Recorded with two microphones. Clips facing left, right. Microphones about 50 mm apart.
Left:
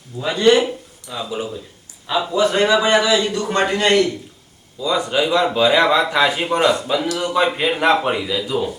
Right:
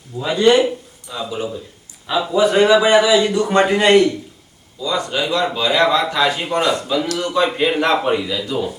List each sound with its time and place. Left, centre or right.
0.2 s a man's voice: centre
4.8 s a man's voice: centre